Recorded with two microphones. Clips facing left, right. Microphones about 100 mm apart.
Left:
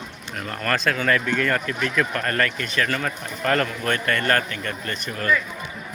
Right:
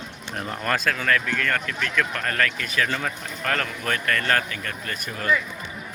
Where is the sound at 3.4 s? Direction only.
5° left (ahead or behind); by 5.4 s 10° right (ahead or behind).